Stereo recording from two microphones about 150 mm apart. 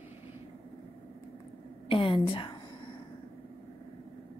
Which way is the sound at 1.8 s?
35° left (ahead or behind).